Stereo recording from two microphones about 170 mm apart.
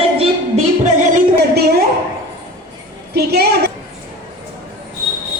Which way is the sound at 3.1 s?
70° right (ahead or behind).